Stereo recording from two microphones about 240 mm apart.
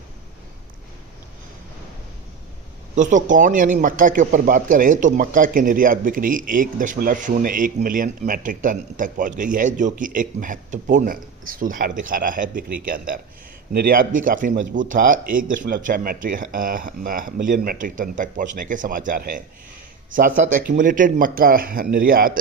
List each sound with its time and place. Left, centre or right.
2.9 s speech: right